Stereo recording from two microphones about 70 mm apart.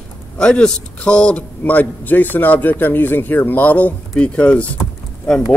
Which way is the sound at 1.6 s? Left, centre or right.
Left.